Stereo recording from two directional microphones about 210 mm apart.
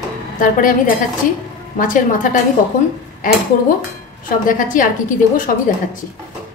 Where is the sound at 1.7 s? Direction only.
40° left (ahead or behind).